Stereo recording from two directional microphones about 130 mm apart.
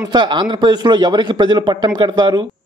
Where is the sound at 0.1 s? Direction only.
35° right (ahead or behind).